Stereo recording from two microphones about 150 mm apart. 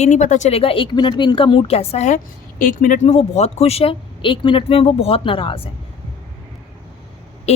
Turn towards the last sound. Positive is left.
turn(degrees=45)  # may be behind; listen again after turning